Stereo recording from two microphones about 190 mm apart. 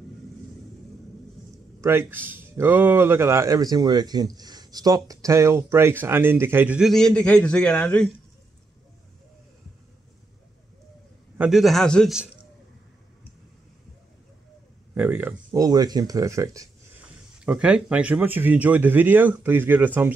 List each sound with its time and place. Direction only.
1.8 s speech: 10° right (ahead or behind); by 8.1 s 5° left (ahead or behind)
11.3 s a man's voice: 5° right (ahead or behind)
15.0 s speech: 10° right (ahead or behind)